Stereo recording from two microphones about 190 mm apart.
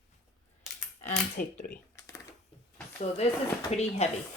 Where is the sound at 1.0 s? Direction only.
40° left (ahead or behind).